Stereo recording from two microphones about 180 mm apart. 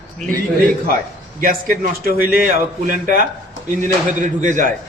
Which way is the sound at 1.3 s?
50° right (ahead or behind).